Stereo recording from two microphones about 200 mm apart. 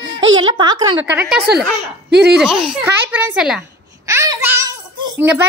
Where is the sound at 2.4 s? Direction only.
5° right (ahead or behind).